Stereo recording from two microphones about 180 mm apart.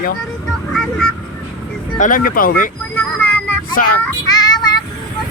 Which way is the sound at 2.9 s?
10° left (ahead or behind).